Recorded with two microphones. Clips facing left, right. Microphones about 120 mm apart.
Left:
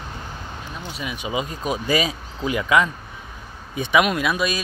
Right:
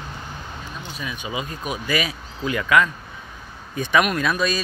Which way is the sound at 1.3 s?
25° left (ahead or behind).